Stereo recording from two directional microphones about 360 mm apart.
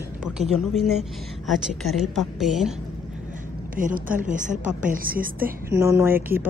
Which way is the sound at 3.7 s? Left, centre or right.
Right.